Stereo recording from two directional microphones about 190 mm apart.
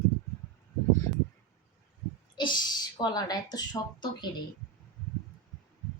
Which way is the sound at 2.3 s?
25° left (ahead or behind).